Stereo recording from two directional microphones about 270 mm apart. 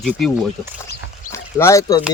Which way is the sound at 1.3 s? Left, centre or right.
Centre.